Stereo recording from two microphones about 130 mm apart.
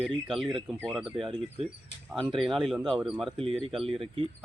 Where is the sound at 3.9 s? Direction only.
40° right (ahead or behind).